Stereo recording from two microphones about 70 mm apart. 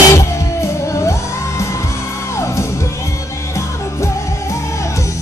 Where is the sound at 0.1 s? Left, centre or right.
Left.